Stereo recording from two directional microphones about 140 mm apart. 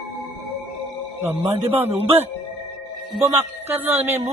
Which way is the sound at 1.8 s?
45° right (ahead or behind).